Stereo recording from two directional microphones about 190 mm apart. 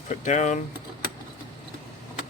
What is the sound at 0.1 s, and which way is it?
Speech, 40° left (ahead or behind).